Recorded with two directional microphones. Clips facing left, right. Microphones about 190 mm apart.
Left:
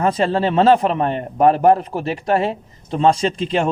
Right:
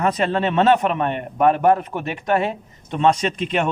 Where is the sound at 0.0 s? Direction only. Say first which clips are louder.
Left 2 dB; 30° left (ahead or behind).